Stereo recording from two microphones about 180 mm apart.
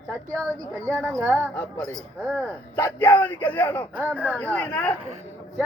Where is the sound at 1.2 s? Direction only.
5° right (ahead or behind).